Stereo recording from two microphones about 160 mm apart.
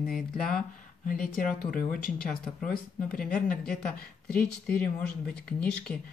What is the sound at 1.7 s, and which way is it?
Speech, 60° left (ahead or behind).